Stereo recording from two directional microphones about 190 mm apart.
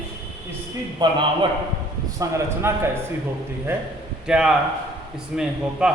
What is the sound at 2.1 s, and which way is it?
Speech, 15° right (ahead or behind).